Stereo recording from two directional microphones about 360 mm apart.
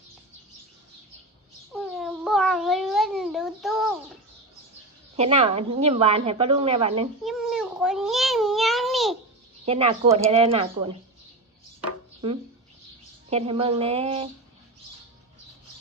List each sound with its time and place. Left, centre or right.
1.7 s cat: centre
5.1 s a woman's voice: centre
7.3 s a sound: centre
9.6 s a woman's voice: centre
13.3 s a woman's voice: centre